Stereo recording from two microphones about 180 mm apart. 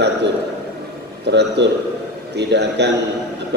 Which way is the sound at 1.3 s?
70° right (ahead or behind).